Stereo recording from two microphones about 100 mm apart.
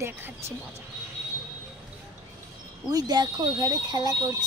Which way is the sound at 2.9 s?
40° right (ahead or behind).